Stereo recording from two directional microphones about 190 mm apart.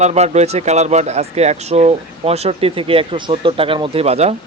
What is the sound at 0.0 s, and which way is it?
Speech, 35° right (ahead or behind).